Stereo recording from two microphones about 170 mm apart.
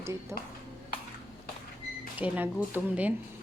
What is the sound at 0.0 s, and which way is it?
Whip, 15° right (ahead or behind).